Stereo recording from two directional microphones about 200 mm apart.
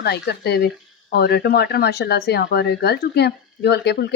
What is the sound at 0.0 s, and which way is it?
A woman's voice, 55° left (ahead or behind).